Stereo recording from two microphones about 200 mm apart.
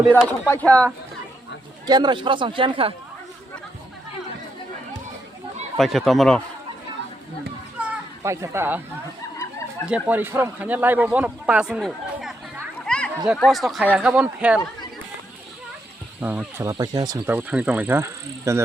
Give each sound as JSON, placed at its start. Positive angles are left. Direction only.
{"t": 0.1, "sound": "speech", "side_deg": 10}
{"t": 1.9, "sound": "speech", "side_deg": -20}
{"t": 5.7, "sound": "speech", "side_deg": 0}
{"t": 7.8, "sound": "a sound", "side_deg": -10}
{"t": 9.8, "sound": "speech", "side_deg": -5}
{"t": 16.2, "sound": "speech", "side_deg": -10}